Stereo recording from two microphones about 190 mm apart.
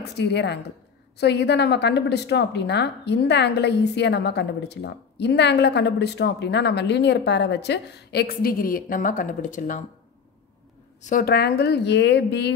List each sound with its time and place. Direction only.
0.0 s a woman's voice: 65° left (ahead or behind); by 9.8 s 40° left (ahead or behind)
11.0 s a woman's voice: 45° left (ahead or behind); by 12.5 s 60° left (ahead or behind)